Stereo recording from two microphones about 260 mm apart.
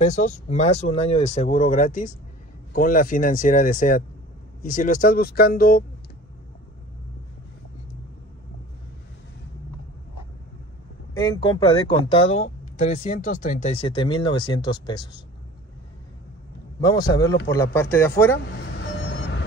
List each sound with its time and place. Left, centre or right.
0.0 s speech: left
11.1 s speech: centre
16.8 s speech: centre
18.7 s vehicle: left